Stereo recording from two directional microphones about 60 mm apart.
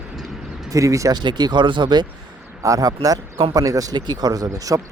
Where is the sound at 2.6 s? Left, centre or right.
Right.